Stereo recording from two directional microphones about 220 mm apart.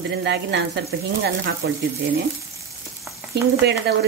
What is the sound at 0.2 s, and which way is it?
Speech, 50° right (ahead or behind).